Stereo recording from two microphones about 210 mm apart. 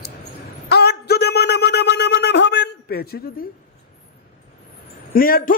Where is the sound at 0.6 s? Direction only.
50° left (ahead or behind).